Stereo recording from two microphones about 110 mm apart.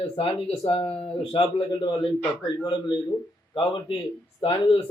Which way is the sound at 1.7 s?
45° left (ahead or behind).